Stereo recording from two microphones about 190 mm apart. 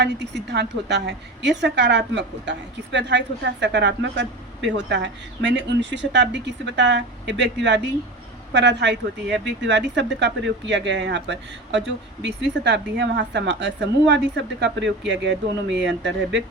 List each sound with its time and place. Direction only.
0.0 s a woman's voice: 65° right (ahead or behind)